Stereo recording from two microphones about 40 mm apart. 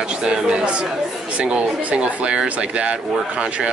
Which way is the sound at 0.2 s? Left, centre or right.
Right.